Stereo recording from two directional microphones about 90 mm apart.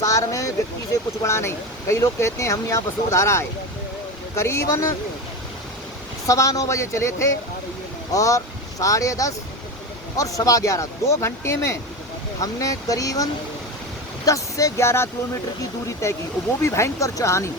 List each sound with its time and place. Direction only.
0.0 s speech: 35° left (ahead or behind)
6.2 s speech: 40° left (ahead or behind)
14.3 s speech: 35° left (ahead or behind)